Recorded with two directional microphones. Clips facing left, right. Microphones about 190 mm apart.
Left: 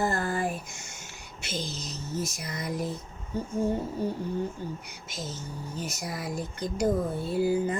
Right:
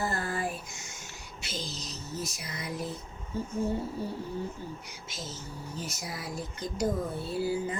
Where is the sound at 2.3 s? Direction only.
45° left (ahead or behind).